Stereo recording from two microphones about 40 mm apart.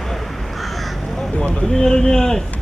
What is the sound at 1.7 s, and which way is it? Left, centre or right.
Speech, centre.